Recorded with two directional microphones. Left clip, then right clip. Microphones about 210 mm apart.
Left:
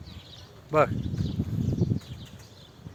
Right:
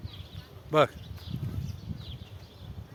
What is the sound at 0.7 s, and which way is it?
Speech, 5° right (ahead or behind).